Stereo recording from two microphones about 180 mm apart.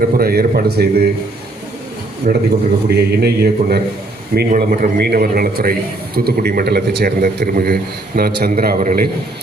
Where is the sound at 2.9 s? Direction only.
60° right (ahead or behind).